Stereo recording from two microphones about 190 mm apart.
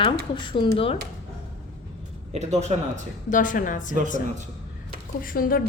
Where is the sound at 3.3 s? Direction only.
45° left (ahead or behind).